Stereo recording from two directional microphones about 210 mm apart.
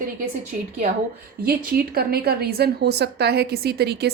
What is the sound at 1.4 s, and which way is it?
A woman's voice, 45° right (ahead or behind).